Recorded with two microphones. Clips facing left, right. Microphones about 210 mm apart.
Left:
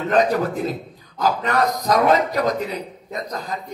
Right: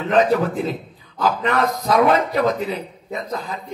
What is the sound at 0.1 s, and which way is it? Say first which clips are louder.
A man's voice: right 2 dB; 40° left (ahead or behind).